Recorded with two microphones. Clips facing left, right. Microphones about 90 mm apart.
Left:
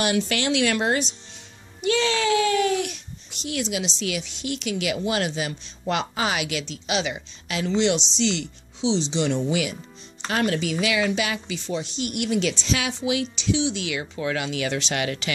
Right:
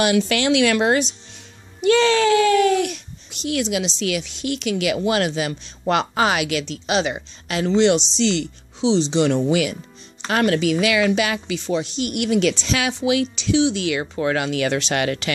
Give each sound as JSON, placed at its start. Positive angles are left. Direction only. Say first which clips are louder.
{"t": 0.0, "sound": "speech", "louder": "right 5 dB", "side_deg": -90}
{"t": 1.8, "sound": "a child's voice", "louder": "right 7 dB", "side_deg": -50}
{"t": 3.4, "sound": "a woman's voice", "louder": "right 5 dB", "side_deg": -70}